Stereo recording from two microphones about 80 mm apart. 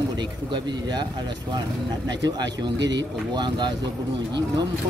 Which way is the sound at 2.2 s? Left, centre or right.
Right.